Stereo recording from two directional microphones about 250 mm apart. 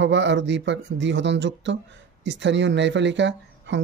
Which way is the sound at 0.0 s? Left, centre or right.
Right.